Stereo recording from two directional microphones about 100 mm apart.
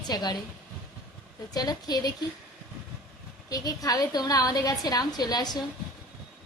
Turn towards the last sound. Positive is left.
turn(degrees=40)  # may be behind; listen again after turning